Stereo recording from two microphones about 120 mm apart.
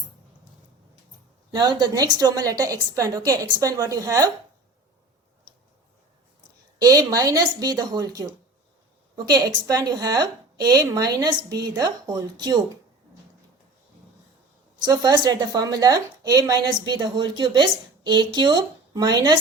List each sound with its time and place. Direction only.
1.5 s a woman's voice: 35° right (ahead or behind)
6.7 s a woman's voice: 30° right (ahead or behind)
14.8 s a woman's voice: 35° right (ahead or behind)